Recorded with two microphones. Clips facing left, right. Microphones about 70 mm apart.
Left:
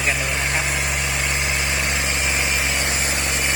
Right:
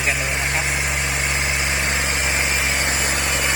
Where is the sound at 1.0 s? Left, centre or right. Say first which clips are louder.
Right 1 dB; right.